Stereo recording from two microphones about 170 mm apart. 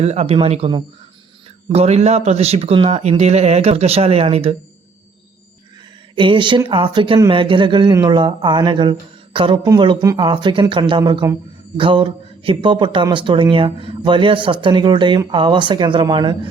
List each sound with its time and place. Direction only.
0.0 s speech: 40° right (ahead or behind)
6.1 s speech: 30° right (ahead or behind)